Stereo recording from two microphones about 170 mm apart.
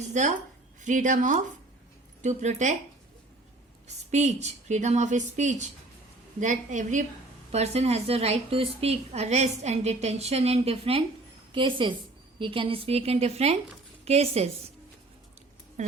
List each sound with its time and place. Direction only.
0.1 s a woman's voice: 45° right (ahead or behind)
3.8 s a woman's voice: 40° right (ahead or behind)